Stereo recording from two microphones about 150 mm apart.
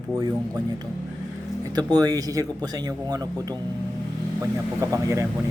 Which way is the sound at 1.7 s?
25° right (ahead or behind).